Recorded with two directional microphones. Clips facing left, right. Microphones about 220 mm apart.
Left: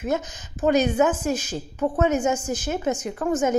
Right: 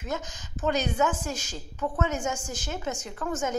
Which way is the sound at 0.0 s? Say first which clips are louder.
Left 8 dB; 20° left (ahead or behind).